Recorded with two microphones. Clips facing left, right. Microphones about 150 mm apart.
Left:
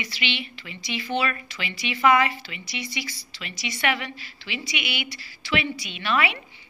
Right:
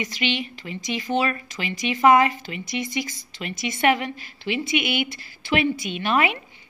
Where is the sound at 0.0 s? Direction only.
45° right (ahead or behind).